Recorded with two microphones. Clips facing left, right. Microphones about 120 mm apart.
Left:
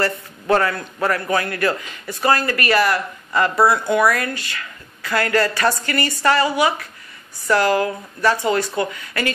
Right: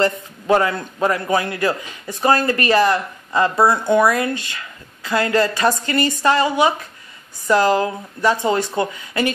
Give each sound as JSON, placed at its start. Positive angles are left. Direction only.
{"t": 0.0, "sound": "a man's voice", "side_deg": -20}